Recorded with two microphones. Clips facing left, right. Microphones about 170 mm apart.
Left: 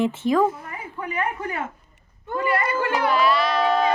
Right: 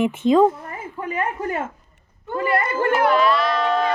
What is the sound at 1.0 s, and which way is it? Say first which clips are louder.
Speech: right 2 dB; 45° right (ahead or behind).